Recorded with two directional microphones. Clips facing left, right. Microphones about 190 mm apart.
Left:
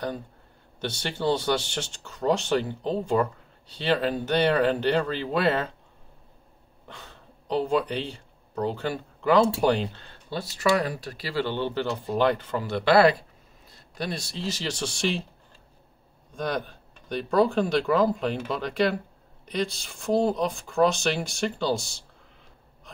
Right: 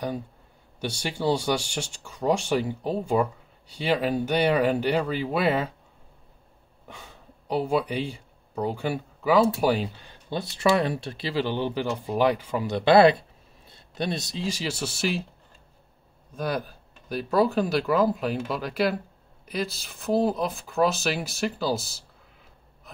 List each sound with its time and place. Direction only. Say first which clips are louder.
0.7 s speech: right 1 dB; 10° right (ahead or behind)
6.9 s speech: even; 10° right (ahead or behind)
16.3 s speech: even; 5° right (ahead or behind)